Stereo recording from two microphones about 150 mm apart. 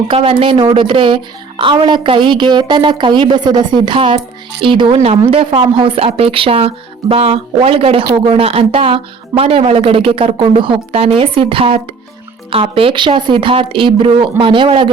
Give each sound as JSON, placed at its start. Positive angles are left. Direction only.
{"t": 0.1, "sound": "a woman's voice", "side_deg": -40}